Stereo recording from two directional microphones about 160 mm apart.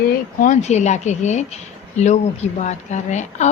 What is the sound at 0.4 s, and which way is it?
Speech, 50° left (ahead or behind).